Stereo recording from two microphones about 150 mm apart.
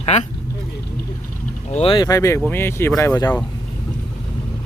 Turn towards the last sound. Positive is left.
turn(degrees=15)  # may be behind; listen again after turning